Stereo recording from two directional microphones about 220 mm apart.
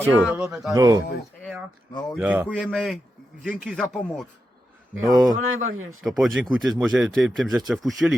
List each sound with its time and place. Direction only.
0.0 s speech: 5° right (ahead or behind)
0.7 s speech: 15° right (ahead or behind)
2.0 s speech: 5° right (ahead or behind)
2.5 s speech: 5° left (ahead or behind)
4.9 s speech: 15° right (ahead or behind)
5.4 s speech: 65° right (ahead or behind)
6.0 s speech: centre (ahead or behind)